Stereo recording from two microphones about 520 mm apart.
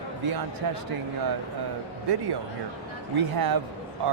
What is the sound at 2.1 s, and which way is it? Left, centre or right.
Speech, right.